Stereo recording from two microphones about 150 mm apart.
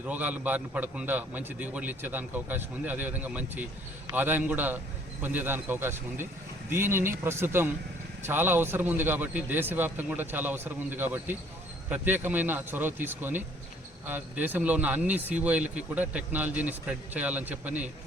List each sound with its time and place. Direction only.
0.0 s a man's voice: 10° right (ahead or behind)